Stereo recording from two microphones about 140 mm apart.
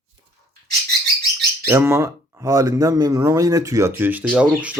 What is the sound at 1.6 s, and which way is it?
Speech, 15° right (ahead or behind).